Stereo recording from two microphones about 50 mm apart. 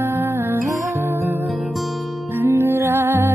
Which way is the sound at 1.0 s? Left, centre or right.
Right.